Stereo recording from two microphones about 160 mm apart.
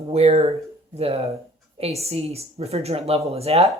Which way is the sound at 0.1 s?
40° right (ahead or behind).